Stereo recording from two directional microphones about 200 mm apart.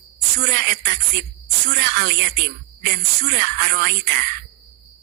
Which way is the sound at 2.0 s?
55° right (ahead or behind).